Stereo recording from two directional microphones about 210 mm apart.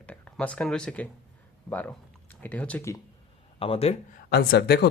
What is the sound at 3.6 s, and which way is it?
Speech, 25° left (ahead or behind).